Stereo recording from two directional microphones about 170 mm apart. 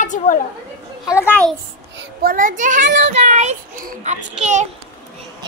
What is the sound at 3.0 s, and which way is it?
Child singing, 40° right (ahead or behind).